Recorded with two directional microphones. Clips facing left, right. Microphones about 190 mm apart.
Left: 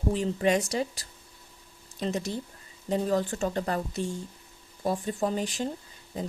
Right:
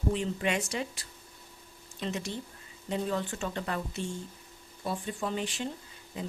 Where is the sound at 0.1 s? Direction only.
40° left (ahead or behind).